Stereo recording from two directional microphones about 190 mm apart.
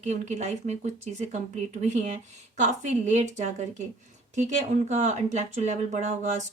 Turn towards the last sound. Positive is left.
turn(degrees=-40)  # may be behind; listen again after turning